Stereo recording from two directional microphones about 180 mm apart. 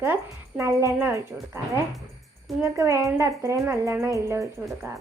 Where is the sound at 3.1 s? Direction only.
15° right (ahead or behind).